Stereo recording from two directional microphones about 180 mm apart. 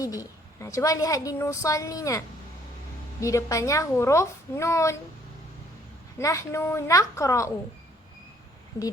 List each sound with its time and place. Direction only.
0.0 s a woman's voice: 20° left (ahead or behind)
6.1 s a woman's voice: 15° left (ahead or behind)